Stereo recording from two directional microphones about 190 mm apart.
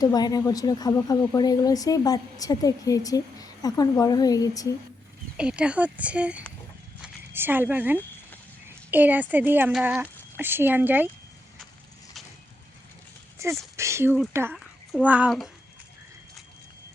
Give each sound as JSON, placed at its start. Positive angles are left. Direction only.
{"t": 0.0, "sound": "speech", "side_deg": 20}
{"t": 5.4, "sound": "speech", "side_deg": -5}
{"t": 7.0, "sound": "a sound", "side_deg": -10}
{"t": 8.9, "sound": "speech", "side_deg": -10}
{"t": 13.4, "sound": "speech", "side_deg": -15}